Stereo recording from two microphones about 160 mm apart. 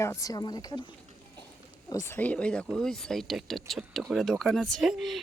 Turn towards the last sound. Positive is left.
turn(degrees=0)  # may be behind; listen again after turning